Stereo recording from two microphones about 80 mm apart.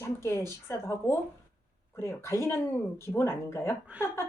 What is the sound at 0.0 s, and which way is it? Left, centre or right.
Speech, left.